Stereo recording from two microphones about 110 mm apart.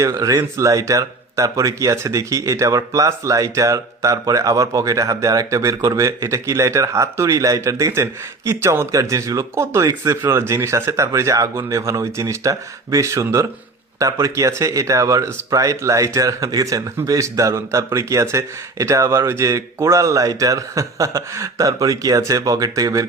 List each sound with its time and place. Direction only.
0.0 s speech: 35° right (ahead or behind)